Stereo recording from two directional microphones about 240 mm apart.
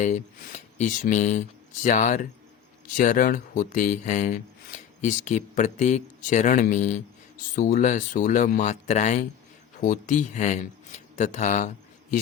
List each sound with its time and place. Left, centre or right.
0.8 s speech: left